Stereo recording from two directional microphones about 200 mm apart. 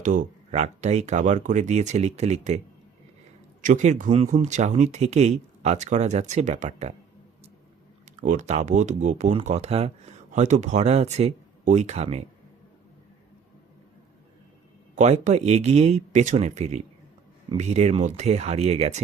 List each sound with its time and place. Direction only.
0.0 s speech: 40° right (ahead or behind)
3.6 s speech: 40° right (ahead or behind)
8.2 s speech: 40° right (ahead or behind)
14.9 s speech: 35° right (ahead or behind)